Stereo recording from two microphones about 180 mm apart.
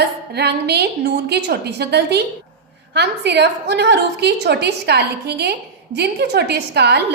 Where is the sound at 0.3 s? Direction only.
65° right (ahead or behind).